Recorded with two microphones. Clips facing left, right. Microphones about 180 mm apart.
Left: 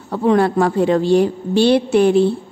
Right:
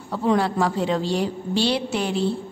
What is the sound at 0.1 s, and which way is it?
A woman's voice, 55° left (ahead or behind).